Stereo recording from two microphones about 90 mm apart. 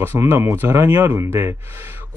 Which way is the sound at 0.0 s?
25° right (ahead or behind).